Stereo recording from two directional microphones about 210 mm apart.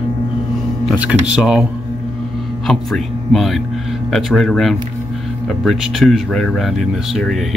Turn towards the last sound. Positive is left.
turn(degrees=0)  # may be behind; listen again after turning